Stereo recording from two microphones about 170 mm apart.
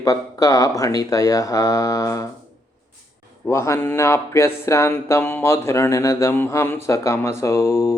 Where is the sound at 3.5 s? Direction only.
15° left (ahead or behind).